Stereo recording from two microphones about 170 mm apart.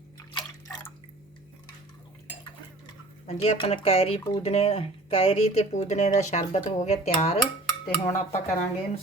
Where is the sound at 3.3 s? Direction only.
35° left (ahead or behind).